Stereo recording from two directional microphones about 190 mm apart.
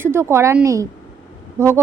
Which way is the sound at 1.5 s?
15° right (ahead or behind).